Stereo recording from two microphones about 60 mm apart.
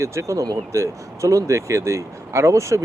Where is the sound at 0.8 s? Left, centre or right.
Right.